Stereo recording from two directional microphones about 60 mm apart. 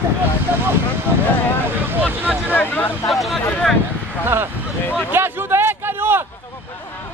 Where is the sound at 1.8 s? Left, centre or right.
Right.